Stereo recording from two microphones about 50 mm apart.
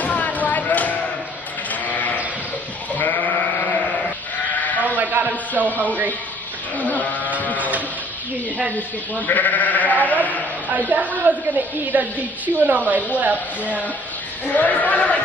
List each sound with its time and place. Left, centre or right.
0.0 s a sound: left
1.7 s sheep: left
4.6 s sheep: left
4.8 s a sound: right
5.7 s sheep: left
9.2 s sheep: left
10.7 s a woman's voice: right
14.5 s sheep: left